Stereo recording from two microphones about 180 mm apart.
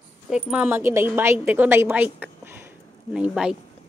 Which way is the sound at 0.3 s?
5° right (ahead or behind).